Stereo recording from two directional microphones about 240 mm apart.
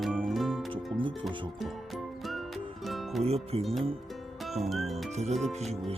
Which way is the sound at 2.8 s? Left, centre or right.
Centre.